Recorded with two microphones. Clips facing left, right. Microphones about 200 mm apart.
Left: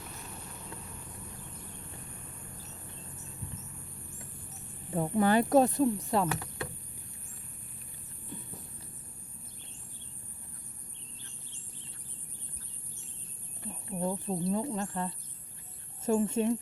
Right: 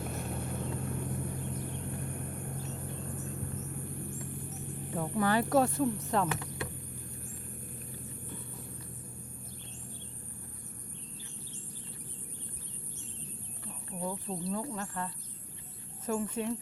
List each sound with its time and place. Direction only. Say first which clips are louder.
0.0 s vehicle: right 9 dB; 55° right (ahead or behind)
4.9 s speech: left 4 dB; 25° left (ahead or behind)
14.0 s speech: left 4 dB; 20° left (ahead or behind)